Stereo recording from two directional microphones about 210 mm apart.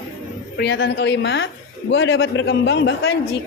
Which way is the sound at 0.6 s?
55° left (ahead or behind).